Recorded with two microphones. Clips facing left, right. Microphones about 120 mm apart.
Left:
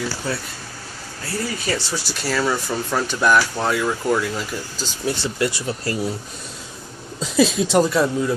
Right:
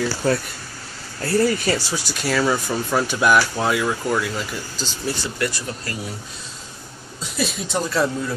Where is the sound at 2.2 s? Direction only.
5° right (ahead or behind).